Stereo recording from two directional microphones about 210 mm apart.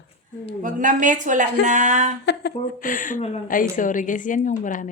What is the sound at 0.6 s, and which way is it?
A woman's voice, 35° right (ahead or behind).